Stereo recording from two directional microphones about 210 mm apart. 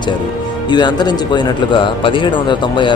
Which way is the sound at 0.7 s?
20° left (ahead or behind).